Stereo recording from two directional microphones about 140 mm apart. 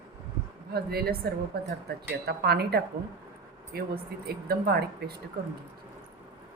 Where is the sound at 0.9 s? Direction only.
90° right.